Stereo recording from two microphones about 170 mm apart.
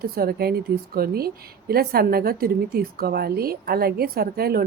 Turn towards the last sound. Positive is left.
turn(degrees=-65)  # may be behind; listen again after turning